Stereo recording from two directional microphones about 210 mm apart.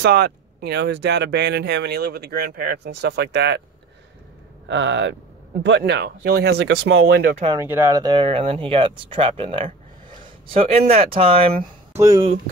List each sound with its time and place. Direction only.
0.0 s speech: 45° right (ahead or behind)
4.6 s speech: 60° right (ahead or behind)
7.5 s speech: 10° right (ahead or behind); by 11.5 s 25° right (ahead or behind)
11.9 s speech: 15° right (ahead or behind)